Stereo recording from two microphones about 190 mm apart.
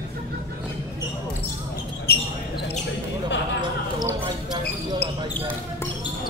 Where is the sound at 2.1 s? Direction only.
55° left (ahead or behind).